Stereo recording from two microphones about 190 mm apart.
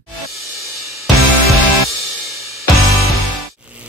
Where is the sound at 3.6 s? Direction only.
5° right (ahead or behind).